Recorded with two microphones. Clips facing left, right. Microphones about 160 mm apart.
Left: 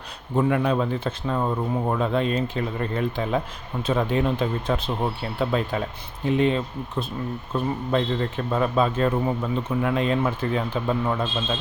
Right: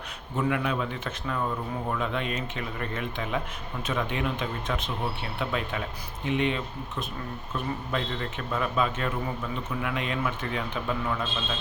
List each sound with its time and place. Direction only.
0.3 s a man's voice: 35° left (ahead or behind)